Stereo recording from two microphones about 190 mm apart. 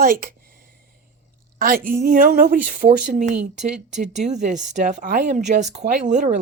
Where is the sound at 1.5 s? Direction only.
50° right (ahead or behind).